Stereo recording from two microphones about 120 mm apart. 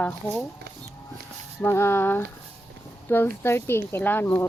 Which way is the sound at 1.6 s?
20° left (ahead or behind).